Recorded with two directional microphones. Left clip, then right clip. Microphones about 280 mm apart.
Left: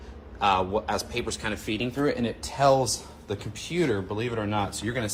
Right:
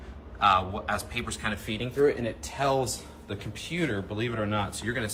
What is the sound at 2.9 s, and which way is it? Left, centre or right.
Speech, centre.